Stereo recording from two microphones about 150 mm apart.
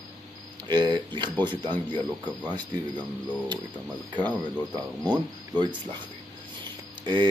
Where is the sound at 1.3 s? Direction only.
10° left (ahead or behind).